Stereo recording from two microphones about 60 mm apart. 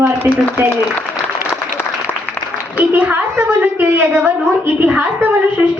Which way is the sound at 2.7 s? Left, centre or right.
Right.